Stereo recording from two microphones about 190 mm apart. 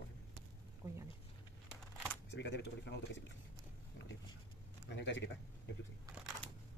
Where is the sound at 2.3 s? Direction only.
65° left (ahead or behind).